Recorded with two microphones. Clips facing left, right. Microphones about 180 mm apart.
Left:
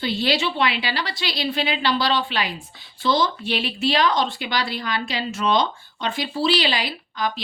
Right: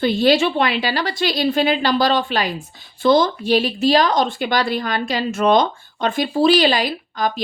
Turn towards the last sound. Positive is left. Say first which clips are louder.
# right 4 dB
turn(degrees=-45)  # may be behind; listen again after turning